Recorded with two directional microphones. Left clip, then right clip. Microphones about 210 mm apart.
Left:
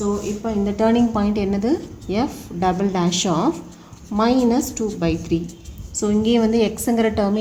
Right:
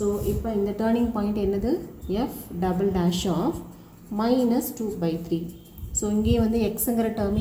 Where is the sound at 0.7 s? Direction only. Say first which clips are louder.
Left 7 dB; 50° left (ahead or behind).